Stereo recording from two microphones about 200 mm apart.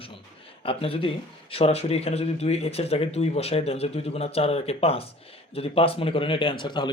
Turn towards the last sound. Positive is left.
turn(degrees=25)  # may be behind; listen again after turning